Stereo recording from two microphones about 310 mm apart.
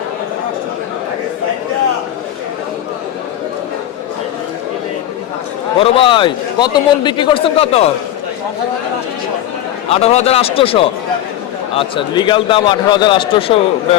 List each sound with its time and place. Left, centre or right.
5.8 s a man's voice: centre
9.9 s a man's voice: left